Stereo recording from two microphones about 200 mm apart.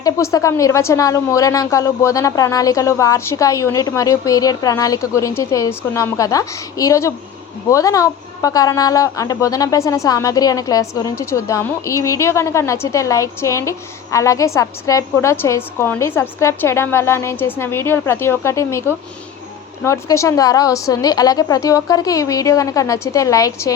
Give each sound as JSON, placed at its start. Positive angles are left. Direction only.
{"t": 0.0, "sound": "speech", "side_deg": 15}